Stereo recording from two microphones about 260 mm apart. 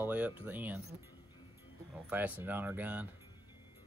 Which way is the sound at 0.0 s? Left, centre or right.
Centre.